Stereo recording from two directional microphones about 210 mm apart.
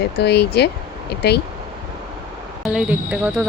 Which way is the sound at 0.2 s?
50° left (ahead or behind).